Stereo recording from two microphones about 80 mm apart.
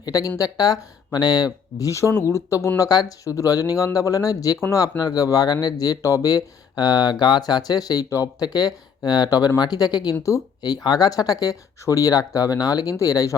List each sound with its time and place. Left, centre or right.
0.0 s speech: left
1.9 s speech: left
2.7 s speech: left